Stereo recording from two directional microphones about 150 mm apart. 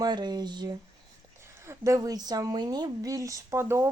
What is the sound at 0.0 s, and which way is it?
Speech, 30° right (ahead or behind).